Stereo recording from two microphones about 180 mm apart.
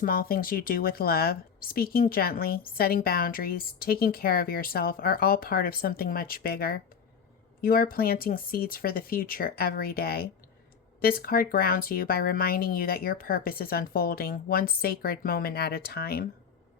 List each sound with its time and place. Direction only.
0.0 s a woman's voice: 55° left (ahead or behind)